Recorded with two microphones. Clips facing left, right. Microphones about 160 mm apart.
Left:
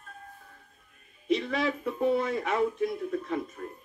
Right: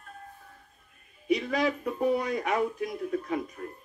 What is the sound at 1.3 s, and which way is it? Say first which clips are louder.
Speech: right 1 dB; centre (ahead or behind).